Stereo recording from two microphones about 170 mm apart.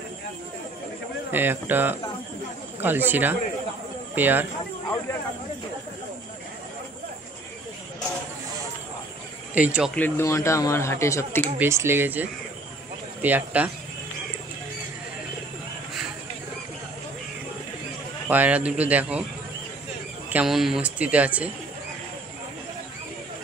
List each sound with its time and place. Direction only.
1.3 s speech: 10° right (ahead or behind)
9.5 s speech: 5° right (ahead or behind)
9.9 s speech: 10° left (ahead or behind)
11.5 s speech: 15° right (ahead or behind)
18.3 s speech: 10° right (ahead or behind)
20.2 s speech: 5° right (ahead or behind)